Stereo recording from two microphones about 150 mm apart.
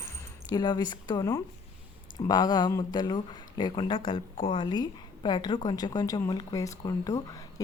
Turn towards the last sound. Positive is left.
turn(degrees=25)  # may be behind; listen again after turning